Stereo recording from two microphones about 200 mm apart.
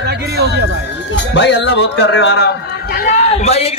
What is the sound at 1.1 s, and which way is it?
A man's voice, 60° left (ahead or behind).